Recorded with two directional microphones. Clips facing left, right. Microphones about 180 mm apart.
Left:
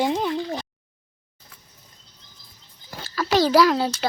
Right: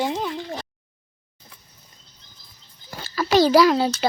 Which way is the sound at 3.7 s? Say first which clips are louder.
Right 2 dB; 5° right (ahead or behind).